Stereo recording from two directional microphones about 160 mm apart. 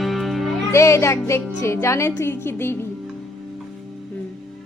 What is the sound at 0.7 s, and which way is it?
Speech, 15° left (ahead or behind).